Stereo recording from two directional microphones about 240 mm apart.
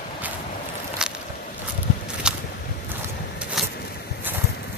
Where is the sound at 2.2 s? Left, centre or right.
Centre.